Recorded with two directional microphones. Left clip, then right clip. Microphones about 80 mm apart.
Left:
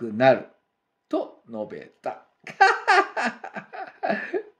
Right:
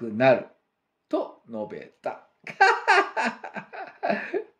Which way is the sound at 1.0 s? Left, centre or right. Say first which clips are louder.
Even; left.